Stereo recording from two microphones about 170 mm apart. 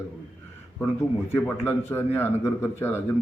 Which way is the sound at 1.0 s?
15° left (ahead or behind).